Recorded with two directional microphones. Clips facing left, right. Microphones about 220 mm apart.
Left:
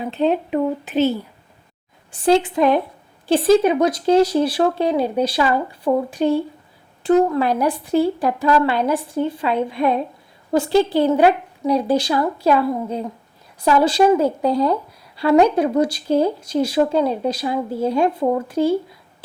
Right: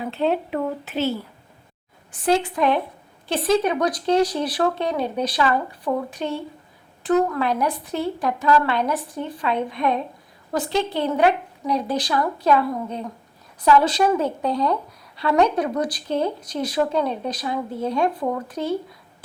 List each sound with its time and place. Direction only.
0.0 s a woman's voice: 20° left (ahead or behind)
2.1 s speech: 30° left (ahead or behind)